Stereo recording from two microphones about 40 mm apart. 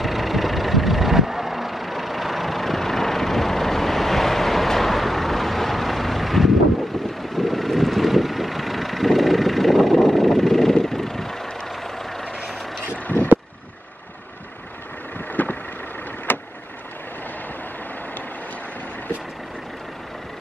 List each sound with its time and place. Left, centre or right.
0.0 s vehicle: centre
13.0 s vehicle: left
15.1 s vehicle: left